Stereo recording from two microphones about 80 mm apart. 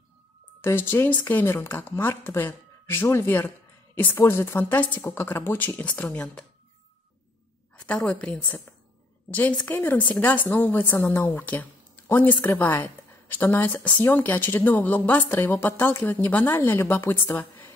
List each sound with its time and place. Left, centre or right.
0.6 s speech: left; by 6.4 s centre
7.8 s speech: centre